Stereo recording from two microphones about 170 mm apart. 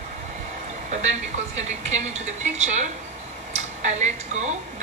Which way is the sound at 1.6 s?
40° right (ahead or behind).